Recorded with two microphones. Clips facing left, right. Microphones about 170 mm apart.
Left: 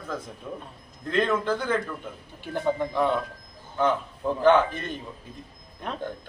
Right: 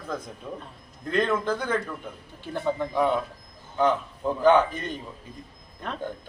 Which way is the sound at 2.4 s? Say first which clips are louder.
Left 1 dB; 15° left (ahead or behind).